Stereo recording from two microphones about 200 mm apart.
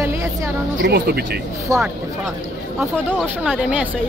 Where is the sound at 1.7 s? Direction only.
15° right (ahead or behind).